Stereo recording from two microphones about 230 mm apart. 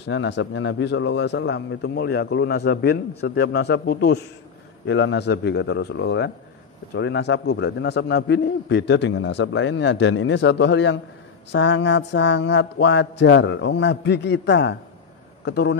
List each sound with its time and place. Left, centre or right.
0.0 s a man's voice: left